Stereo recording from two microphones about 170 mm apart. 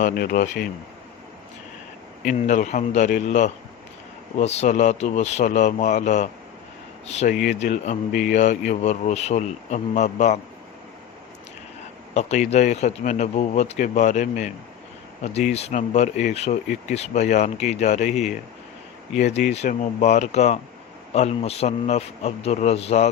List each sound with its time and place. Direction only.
0.0 s speech: 55° left (ahead or behind)
2.2 s a man's voice: 45° left (ahead or behind)
12.1 s a man's voice: 40° left (ahead or behind)
19.1 s a man's voice: 40° left (ahead or behind)